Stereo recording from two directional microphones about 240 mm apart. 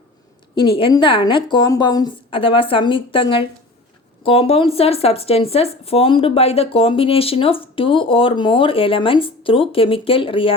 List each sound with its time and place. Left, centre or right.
0.5 s speech: centre